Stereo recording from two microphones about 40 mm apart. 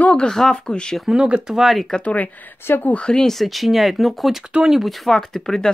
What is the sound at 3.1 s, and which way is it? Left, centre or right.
Speech, centre.